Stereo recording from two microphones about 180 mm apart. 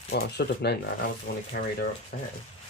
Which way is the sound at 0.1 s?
65° left (ahead or behind).